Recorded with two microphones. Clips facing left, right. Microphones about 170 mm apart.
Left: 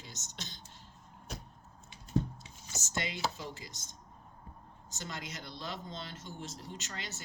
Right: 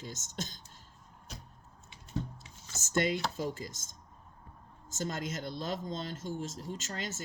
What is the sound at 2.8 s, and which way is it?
Speech, 50° right (ahead or behind).